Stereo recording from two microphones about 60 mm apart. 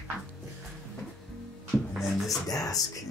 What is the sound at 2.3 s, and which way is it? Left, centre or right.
Speech, left.